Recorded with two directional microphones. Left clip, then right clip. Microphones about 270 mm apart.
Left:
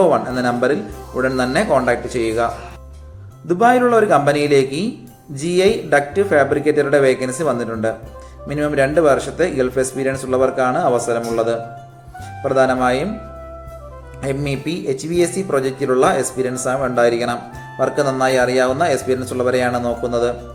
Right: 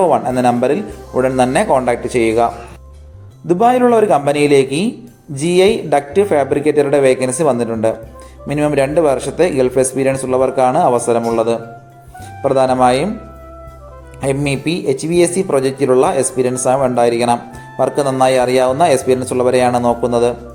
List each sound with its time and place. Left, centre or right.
0.0 s speech: centre
14.2 s a man's voice: centre